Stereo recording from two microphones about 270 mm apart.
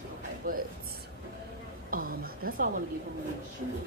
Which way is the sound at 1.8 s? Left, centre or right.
Right.